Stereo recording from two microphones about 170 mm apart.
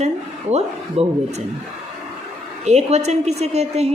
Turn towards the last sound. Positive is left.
turn(degrees=-40)  # may be behind; listen again after turning